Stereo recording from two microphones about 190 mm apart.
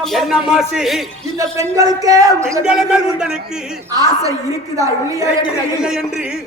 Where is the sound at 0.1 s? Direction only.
Centre (ahead or behind).